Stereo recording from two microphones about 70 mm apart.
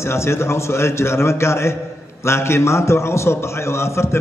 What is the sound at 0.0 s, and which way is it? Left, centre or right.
A man's voice, left.